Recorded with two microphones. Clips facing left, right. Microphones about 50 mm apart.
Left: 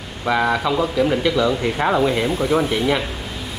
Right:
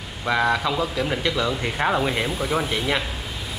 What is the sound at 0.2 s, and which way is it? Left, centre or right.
Speech, centre.